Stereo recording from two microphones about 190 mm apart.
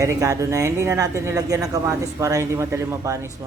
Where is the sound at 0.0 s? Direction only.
15° right (ahead or behind).